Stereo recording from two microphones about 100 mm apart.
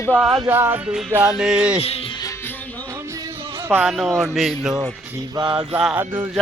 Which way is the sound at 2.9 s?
30° right (ahead or behind).